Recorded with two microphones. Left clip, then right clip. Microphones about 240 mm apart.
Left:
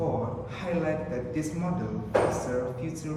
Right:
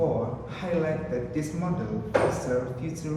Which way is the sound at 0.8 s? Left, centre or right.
Centre.